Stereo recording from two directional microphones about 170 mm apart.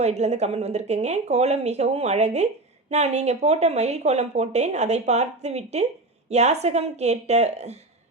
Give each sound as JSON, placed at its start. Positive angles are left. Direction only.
{"t": 0.0, "sound": "speech", "side_deg": -40}